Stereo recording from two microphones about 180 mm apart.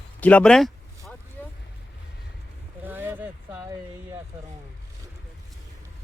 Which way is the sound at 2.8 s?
10° right (ahead or behind).